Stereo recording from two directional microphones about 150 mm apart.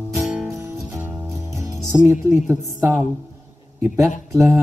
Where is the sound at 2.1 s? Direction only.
15° right (ahead or behind).